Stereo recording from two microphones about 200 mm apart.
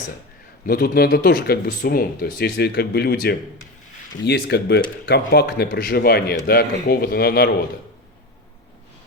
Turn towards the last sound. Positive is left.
turn(degrees=50)  # may be behind; listen again after turning